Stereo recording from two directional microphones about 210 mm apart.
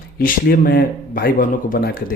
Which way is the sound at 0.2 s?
45° left (ahead or behind).